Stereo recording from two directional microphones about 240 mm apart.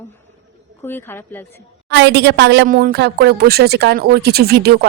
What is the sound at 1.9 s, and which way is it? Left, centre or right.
A woman's voice, right.